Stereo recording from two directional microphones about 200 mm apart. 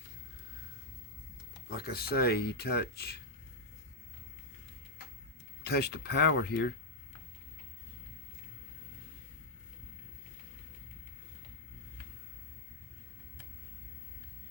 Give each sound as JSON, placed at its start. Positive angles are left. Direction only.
{"t": 1.7, "sound": "speech", "side_deg": 50}
{"t": 5.6, "sound": "speech", "side_deg": 55}